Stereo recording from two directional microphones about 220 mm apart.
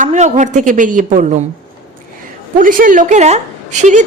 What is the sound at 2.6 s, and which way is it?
A woman's voice, 40° right (ahead or behind).